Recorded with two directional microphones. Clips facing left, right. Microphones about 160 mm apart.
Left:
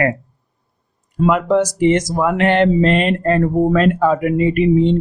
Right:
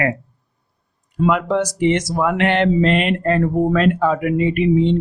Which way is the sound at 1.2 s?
45° left (ahead or behind).